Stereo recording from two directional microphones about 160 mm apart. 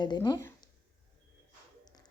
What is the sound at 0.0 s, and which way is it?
Speech, 25° left (ahead or behind).